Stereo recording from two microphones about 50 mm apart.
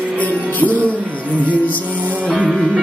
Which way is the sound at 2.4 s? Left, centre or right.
Centre.